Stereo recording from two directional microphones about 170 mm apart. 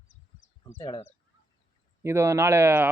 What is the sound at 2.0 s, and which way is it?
Speech, 15° right (ahead or behind).